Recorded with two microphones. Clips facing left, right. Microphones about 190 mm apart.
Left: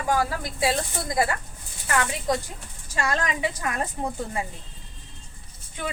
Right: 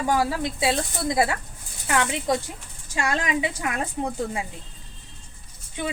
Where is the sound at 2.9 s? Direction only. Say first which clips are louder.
Right 1 dB; 15° right (ahead or behind).